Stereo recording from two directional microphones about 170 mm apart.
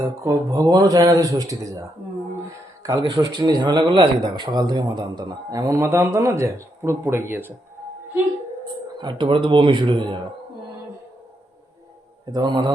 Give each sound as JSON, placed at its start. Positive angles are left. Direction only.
{"t": 0.0, "sound": "a man's voice", "side_deg": -20}
{"t": 2.8, "sound": "a man's voice", "side_deg": -25}
{"t": 9.0, "sound": "a man's voice", "side_deg": -25}
{"t": 12.2, "sound": "a man's voice", "side_deg": -25}